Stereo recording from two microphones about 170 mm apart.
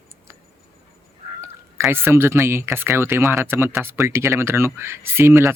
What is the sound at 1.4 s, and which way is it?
Speech, 15° right (ahead or behind).